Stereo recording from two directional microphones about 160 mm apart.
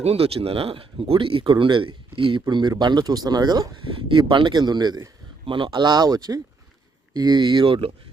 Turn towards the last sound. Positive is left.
turn(degrees=-30)  # may be behind; listen again after turning